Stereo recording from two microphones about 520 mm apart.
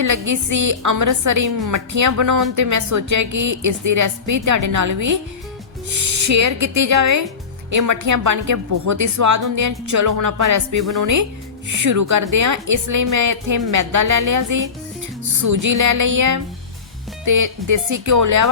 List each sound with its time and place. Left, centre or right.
0.0 s a woman's voice: right